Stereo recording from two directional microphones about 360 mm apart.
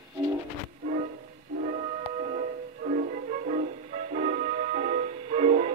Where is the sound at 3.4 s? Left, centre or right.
Centre.